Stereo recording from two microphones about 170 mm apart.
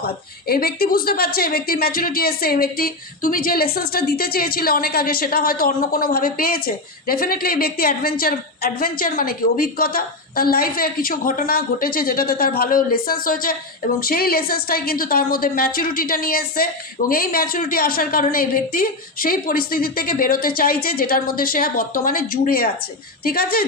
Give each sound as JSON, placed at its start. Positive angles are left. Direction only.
{"t": 0.0, "sound": "a woman's voice", "side_deg": 65}